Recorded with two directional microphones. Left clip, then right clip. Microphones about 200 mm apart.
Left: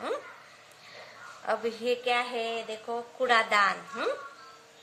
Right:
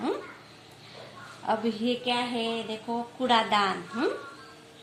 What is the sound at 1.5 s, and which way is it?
A woman's voice, 50° left (ahead or behind).